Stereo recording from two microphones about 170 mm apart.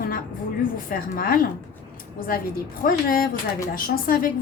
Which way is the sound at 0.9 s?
55° left (ahead or behind).